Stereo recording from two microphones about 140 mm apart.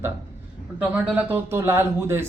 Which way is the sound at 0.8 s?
15° right (ahead or behind).